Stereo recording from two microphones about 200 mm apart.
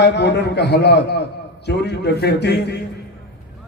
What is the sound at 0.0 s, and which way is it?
A man's voice, 60° left (ahead or behind).